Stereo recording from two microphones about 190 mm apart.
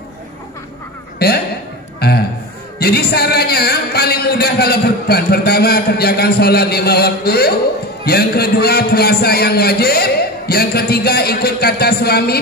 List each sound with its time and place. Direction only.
2.0 s a man's voice: 55° left (ahead or behind)